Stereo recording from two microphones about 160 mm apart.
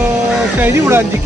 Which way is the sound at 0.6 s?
15° right (ahead or behind).